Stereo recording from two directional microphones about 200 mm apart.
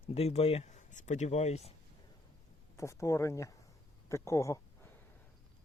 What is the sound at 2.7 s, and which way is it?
Speech, 15° left (ahead or behind).